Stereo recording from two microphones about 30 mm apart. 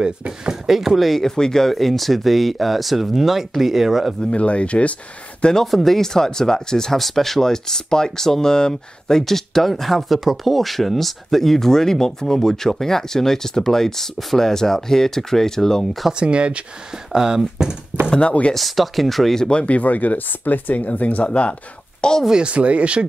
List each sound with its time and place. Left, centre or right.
0.7 s speech: centre
1.2 s speech: centre
4.3 s speech: left
5.7 s speech: centre
7.0 s speech: centre
16.1 s speech: right
17.1 s speech: right
18.5 s speech: centre
19.5 s speech: left
20.8 s speech: left
21.3 s speech: left
22.4 s speech: right